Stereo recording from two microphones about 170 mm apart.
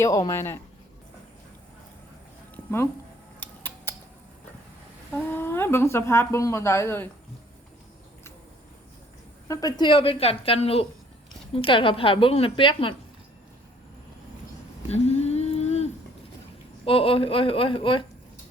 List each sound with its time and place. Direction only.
0.0 s speech: 20° left (ahead or behind)
2.6 s speech: 15° left (ahead or behind)
3.4 s a sound: 10° left (ahead or behind)
5.1 s speech: 10° left (ahead or behind)
9.5 s a woman's voice: 20° left (ahead or behind)
14.8 s a sound: 40° left (ahead or behind)
16.8 s a woman's voice: 35° left (ahead or behind)